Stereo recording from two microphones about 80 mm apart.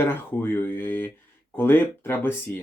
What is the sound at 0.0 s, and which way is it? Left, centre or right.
Speech, left.